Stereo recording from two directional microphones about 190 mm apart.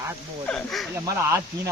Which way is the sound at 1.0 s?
15° right (ahead or behind).